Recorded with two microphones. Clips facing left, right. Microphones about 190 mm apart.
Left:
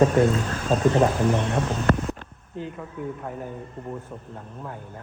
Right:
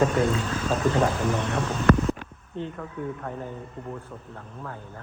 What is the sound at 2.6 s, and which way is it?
Speech, 5° left (ahead or behind).